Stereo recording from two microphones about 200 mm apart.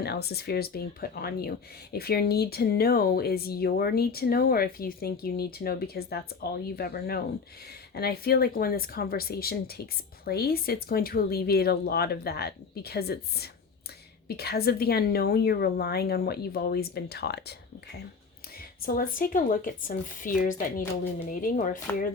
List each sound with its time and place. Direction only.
0.0 s speech: 55° left (ahead or behind)
18.8 s speech: 45° left (ahead or behind)